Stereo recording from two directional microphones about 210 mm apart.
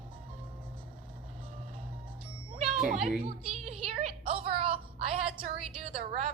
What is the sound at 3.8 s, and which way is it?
A woman's voice, 30° right (ahead or behind).